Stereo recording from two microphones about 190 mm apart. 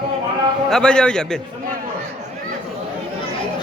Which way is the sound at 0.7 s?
5° left (ahead or behind).